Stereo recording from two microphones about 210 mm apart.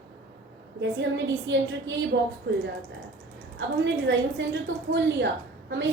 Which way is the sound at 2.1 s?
50° right (ahead or behind).